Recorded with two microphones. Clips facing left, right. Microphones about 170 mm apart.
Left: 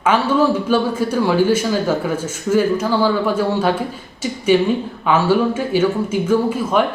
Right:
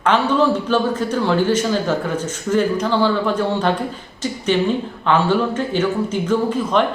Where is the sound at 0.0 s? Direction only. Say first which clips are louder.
Left 1 dB; 10° left (ahead or behind).